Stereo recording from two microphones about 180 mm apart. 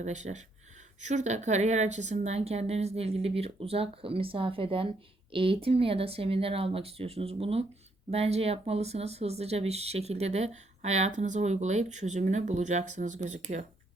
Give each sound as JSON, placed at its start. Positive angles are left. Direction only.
{"t": 0.0, "sound": "speech", "side_deg": -40}